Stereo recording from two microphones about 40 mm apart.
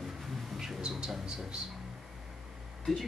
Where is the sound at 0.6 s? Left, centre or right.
Centre.